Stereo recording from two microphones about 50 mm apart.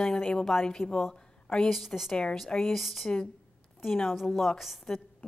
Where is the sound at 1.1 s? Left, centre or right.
Centre.